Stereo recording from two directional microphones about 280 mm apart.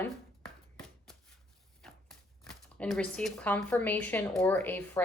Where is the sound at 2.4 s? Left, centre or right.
Centre.